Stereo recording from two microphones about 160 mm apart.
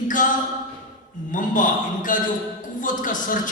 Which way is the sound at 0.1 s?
55° left (ahead or behind).